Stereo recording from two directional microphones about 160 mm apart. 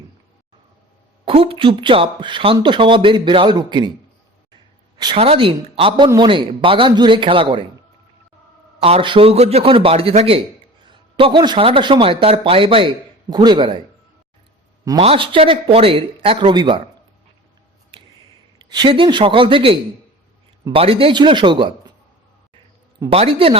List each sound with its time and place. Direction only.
1.2 s speech: 35° right (ahead or behind)
4.9 s speech: 30° right (ahead or behind)
8.8 s a man's voice: 35° right (ahead or behind)
14.8 s speech: 35° right (ahead or behind)
17.9 s a sound: 35° right (ahead or behind)
18.7 s speech: 30° right (ahead or behind)
23.0 s speech: 35° right (ahead or behind)